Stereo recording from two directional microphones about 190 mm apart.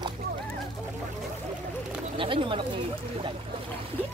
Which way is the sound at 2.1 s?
25° right (ahead or behind).